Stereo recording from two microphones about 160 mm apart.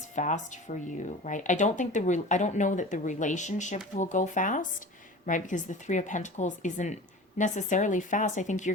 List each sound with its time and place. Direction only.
0.2 s speech: 50° left (ahead or behind)